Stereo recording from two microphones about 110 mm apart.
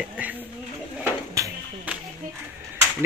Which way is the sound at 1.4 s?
30° right (ahead or behind).